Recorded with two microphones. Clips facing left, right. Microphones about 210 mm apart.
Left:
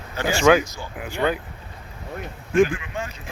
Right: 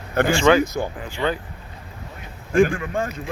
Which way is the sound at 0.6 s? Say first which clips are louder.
Right 11 dB; 55° right (ahead or behind).